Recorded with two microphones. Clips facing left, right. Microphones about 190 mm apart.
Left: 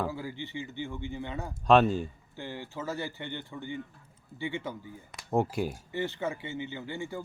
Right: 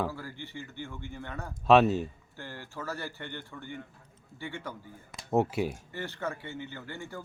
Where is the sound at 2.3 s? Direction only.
15° left (ahead or behind).